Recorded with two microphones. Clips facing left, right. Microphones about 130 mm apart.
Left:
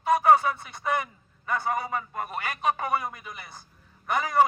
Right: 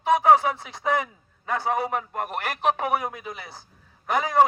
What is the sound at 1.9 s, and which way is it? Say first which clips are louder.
A man's voice: right 3 dB; 65° right (ahead or behind).